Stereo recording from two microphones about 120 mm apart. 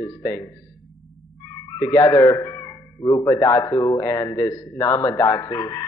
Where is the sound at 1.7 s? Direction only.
30° left (ahead or behind).